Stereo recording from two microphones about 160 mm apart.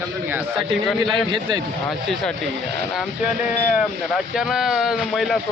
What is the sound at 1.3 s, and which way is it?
Speech, 30° right (ahead or behind).